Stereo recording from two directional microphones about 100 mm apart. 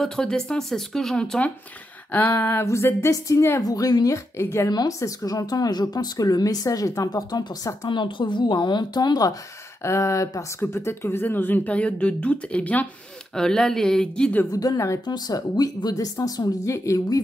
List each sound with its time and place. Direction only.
0.0 s speech: 5° left (ahead or behind)
2.1 s a woman's voice: 20° left (ahead or behind); by 4.2 s 35° left (ahead or behind)
4.4 s a woman's voice: 25° left (ahead or behind)
4.6 s speech: 40° left (ahead or behind)
7.9 s speech: 55° left (ahead or behind)
9.8 s speech: 30° left (ahead or behind); by 14.4 s 10° left (ahead or behind)
14.5 s speech: 40° left (ahead or behind)